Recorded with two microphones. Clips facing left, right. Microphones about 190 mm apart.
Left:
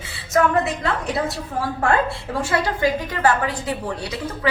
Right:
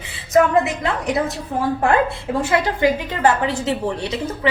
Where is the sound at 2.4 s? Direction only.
20° right (ahead or behind).